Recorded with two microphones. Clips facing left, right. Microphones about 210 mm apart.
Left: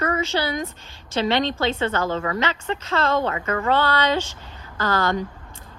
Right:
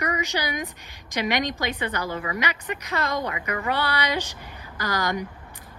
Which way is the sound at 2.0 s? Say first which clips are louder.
Left 5 dB; 40° left (ahead or behind).